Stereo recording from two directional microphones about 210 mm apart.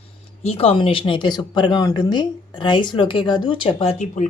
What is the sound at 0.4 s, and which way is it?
Speech, 30° left (ahead or behind).